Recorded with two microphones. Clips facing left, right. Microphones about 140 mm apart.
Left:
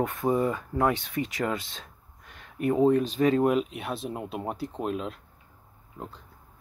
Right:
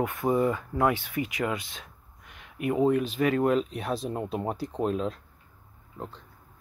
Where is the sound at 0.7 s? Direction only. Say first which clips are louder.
Even; 20° right (ahead or behind).